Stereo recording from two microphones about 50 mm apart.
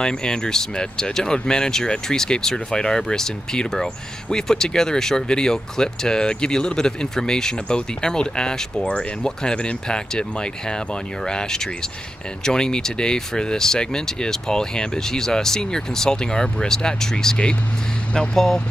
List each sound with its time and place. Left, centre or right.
0.0 s speech: centre